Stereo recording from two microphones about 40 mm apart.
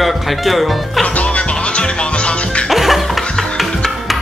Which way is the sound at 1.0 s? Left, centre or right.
Left.